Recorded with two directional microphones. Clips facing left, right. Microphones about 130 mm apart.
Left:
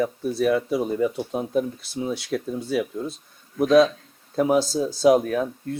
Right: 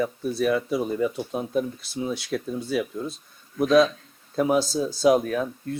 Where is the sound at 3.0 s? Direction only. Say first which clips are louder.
Left 1 dB; 40° left (ahead or behind).